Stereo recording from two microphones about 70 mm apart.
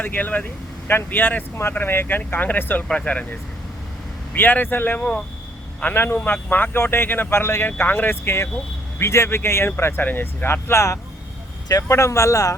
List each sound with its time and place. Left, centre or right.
0.0 s speech: left
2.8 s speech: centre
4.4 s speech: left
5.8 s speech: left